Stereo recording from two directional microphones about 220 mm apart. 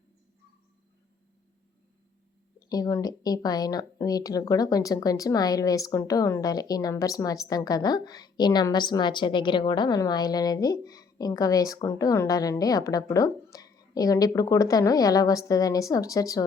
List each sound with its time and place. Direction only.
2.6 s speech: 15° left (ahead or behind)